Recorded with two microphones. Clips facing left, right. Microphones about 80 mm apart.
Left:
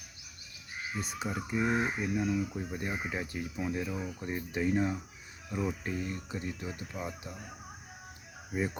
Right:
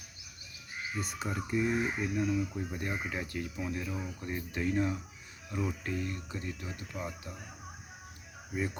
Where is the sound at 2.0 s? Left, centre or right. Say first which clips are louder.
Even; centre.